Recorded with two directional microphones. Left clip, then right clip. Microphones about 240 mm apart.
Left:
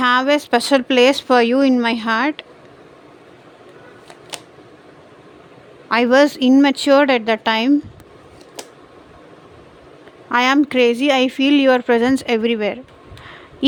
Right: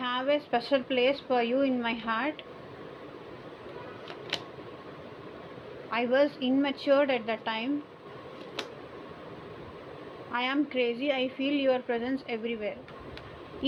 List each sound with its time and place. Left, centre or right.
0.0 s a woman's voice: left
5.9 s a woman's voice: left
10.3 s a woman's voice: left